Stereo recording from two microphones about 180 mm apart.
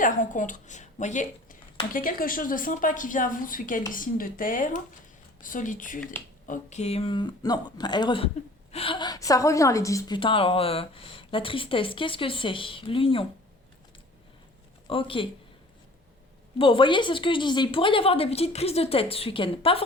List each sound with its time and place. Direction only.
0.0 s a woman's voice: 45° left (ahead or behind); by 10.2 s 15° left (ahead or behind)
10.2 s speech: 30° left (ahead or behind)
14.8 s speech: 30° left (ahead or behind)
16.6 s speech: 30° left (ahead or behind)